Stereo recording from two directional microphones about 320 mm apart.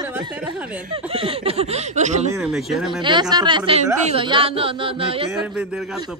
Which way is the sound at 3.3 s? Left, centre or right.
Centre.